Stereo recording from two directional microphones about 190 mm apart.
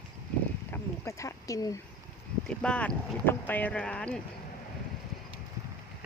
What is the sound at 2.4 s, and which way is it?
Speech, 5° left (ahead or behind).